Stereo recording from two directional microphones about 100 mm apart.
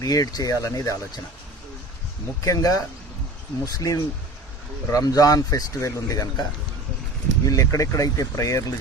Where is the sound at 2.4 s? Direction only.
35° left (ahead or behind).